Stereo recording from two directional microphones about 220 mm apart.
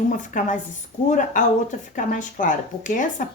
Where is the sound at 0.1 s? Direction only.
35° left (ahead or behind).